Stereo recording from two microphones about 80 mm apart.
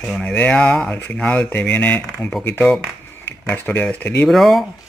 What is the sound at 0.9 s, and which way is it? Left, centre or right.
Speech, centre.